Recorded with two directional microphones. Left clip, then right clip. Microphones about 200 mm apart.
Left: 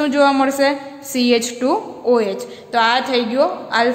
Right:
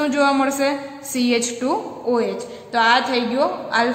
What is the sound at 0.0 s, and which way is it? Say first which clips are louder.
A woman's voice: left 3 dB; 25° left (ahead or behind).